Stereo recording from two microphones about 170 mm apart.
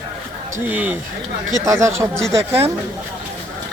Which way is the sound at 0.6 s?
10° right (ahead or behind).